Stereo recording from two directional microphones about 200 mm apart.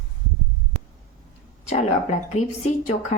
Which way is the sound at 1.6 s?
35° left (ahead or behind).